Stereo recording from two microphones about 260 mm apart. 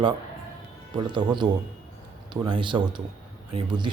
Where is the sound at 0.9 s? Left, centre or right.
Centre.